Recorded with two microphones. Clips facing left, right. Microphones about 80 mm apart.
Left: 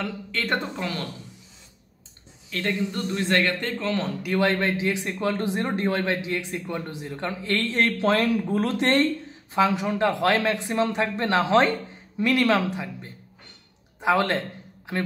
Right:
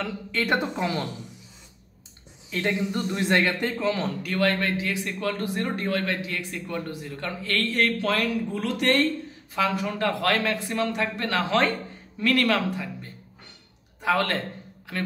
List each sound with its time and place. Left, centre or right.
0.0 s speech: centre
0.6 s speech: centre
2.5 s speech: centre
4.2 s speech: centre
8.5 s speech: left
8.7 s speech: left